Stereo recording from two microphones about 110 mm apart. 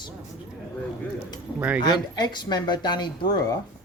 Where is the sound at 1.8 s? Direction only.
40° left (ahead or behind).